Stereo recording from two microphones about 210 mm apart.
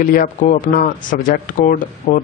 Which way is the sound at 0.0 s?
40° left (ahead or behind).